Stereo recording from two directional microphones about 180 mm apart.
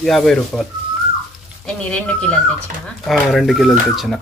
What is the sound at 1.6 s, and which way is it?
Speech, 5° left (ahead or behind).